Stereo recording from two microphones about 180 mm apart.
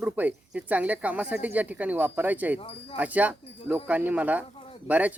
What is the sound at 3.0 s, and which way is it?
Speech, 10° right (ahead or behind).